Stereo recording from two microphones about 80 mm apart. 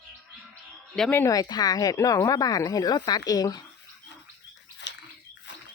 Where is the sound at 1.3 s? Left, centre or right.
Left.